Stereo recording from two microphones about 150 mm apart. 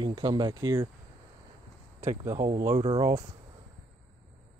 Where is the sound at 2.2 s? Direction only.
20° right (ahead or behind).